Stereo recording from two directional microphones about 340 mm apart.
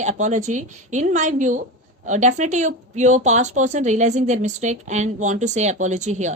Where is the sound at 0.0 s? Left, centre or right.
Right.